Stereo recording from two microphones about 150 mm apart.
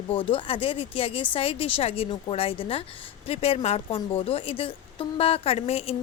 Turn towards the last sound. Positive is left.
turn(degrees=40)  # may be behind; listen again after turning